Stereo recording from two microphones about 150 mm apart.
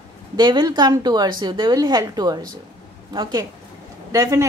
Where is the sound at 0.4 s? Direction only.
30° right (ahead or behind).